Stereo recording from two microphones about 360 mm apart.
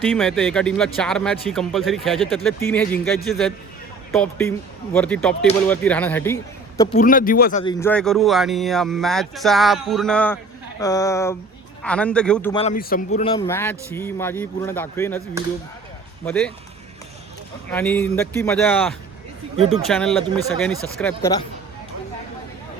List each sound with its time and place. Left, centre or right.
0.0 s speech: centre
6.9 s speech: left
7.6 s a man's voice: centre
12.5 s speech: centre
13.1 s a man's voice: centre
16.2 s speech: centre
17.7 s a man's voice: centre